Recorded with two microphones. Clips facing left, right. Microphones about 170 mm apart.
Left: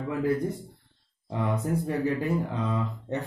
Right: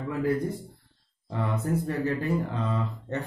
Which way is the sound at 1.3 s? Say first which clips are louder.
Even; 15° left (ahead or behind).